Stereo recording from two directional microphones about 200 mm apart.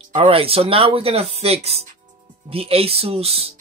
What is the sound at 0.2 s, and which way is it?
Speech, 30° right (ahead or behind).